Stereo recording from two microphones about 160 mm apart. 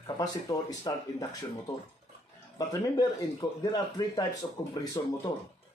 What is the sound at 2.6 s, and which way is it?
Speech, 20° left (ahead or behind).